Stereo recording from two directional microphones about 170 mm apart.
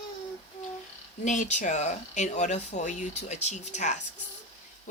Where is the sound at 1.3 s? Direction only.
45° left (ahead or behind).